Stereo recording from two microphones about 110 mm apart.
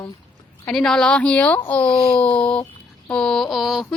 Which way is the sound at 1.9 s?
50° left (ahead or behind).